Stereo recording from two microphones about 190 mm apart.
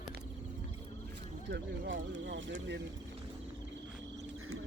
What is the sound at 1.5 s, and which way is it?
Speech, 75° right (ahead or behind).